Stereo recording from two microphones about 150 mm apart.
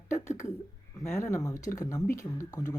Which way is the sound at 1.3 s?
20° left (ahead or behind).